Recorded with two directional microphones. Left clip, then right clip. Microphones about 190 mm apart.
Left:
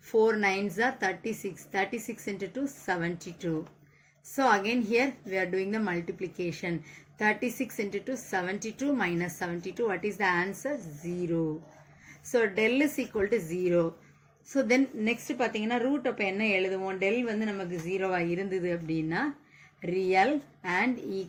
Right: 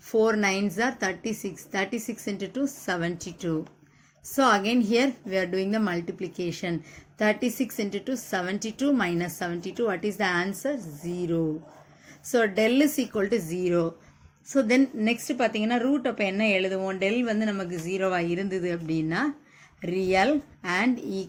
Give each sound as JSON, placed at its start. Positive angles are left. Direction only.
{"t": 0.1, "sound": "a woman's voice", "side_deg": -40}
{"t": 12.3, "sound": "a woman's voice", "side_deg": -45}